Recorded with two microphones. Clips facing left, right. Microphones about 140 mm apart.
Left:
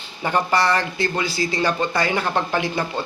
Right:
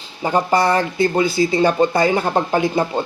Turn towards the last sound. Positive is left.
turn(degrees=-20)  # may be behind; listen again after turning